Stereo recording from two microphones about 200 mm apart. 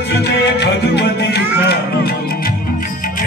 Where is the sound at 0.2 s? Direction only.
55° left (ahead or behind).